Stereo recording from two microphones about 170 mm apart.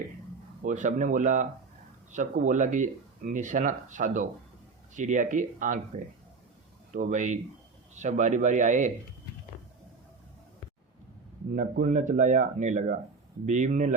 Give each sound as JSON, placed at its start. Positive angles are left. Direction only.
{"t": 0.6, "sound": "speech", "side_deg": -50}
{"t": 6.9, "sound": "speech", "side_deg": -45}
{"t": 11.5, "sound": "speech", "side_deg": -45}